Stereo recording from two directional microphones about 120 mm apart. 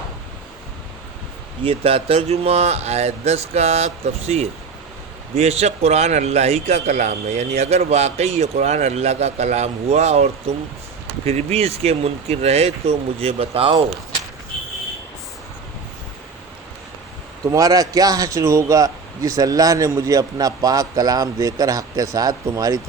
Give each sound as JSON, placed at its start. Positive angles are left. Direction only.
{"t": 1.6, "sound": "speech", "side_deg": -50}
{"t": 17.5, "sound": "a man's voice", "side_deg": -30}